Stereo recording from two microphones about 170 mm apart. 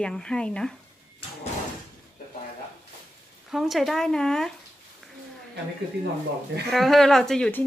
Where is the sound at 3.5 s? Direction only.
Centre (ahead or behind).